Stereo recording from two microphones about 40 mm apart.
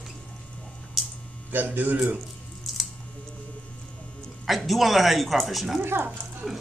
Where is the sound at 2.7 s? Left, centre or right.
Centre.